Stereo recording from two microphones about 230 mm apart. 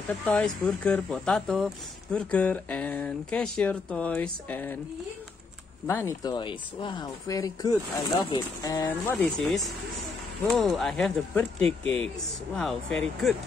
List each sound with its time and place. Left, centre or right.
0.2 s speech: centre
5.9 s speech: centre
11.8 s speech: right
12.5 s speech: centre